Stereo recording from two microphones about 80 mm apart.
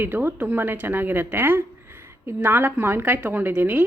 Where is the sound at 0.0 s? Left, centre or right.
Right.